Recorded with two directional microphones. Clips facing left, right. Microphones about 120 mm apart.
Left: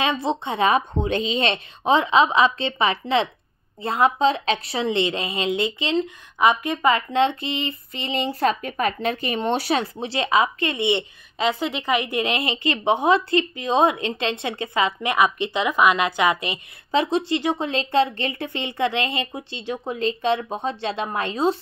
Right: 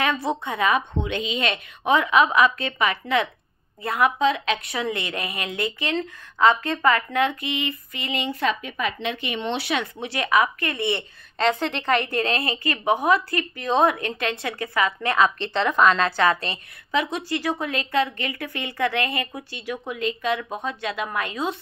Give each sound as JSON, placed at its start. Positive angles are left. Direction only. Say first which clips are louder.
{"t": 0.0, "sound": "a woman's voice", "louder": "left 1 dB", "side_deg": 25}
{"t": 11.3, "sound": "a woman's voice", "louder": "right 1 dB", "side_deg": 10}
{"t": 16.9, "sound": "a woman's voice", "louder": "left 4 dB", "side_deg": 30}